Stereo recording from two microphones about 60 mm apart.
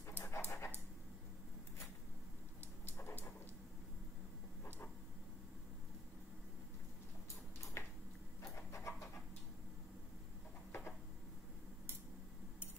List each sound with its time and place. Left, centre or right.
0.1 s pant: left
2.9 s dog: left
7.8 s a sound: left
8.7 s vehicle: left